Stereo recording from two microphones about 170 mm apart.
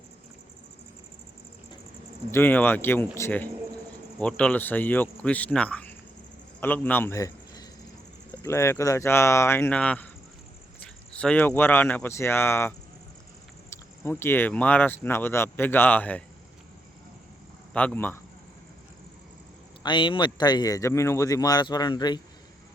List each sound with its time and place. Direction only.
2.3 s a man's voice: 10° left (ahead or behind)
17.7 s speech: 10° left (ahead or behind)
19.8 s speech: 30° left (ahead or behind)